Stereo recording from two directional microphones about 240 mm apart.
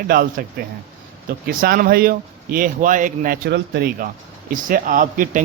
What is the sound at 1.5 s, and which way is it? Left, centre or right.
A man's voice, right.